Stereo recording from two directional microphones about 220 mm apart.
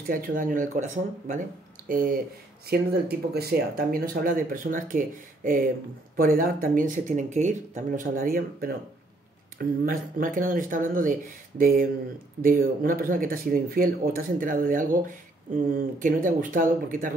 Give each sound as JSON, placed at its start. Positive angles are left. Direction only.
{"t": 0.1, "sound": "speech", "side_deg": -40}